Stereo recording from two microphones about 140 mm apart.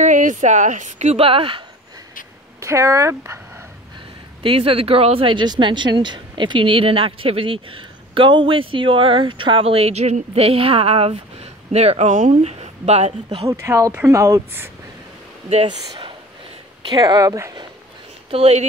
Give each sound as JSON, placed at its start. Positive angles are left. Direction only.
{"t": 0.0, "sound": "speech", "side_deg": -65}
{"t": 2.6, "sound": "speech", "side_deg": -20}
{"t": 4.4, "sound": "speech", "side_deg": -40}
{"t": 13.5, "sound": "speech", "side_deg": -20}
{"t": 15.5, "sound": "speech", "side_deg": -40}
{"t": 16.9, "sound": "speech", "side_deg": -25}
{"t": 18.3, "sound": "speech", "side_deg": -45}